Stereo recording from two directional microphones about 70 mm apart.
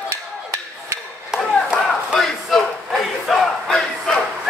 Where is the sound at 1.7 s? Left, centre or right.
Centre.